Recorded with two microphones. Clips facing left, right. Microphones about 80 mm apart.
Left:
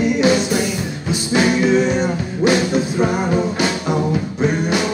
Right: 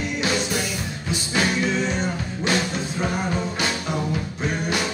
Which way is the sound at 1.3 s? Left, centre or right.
Centre.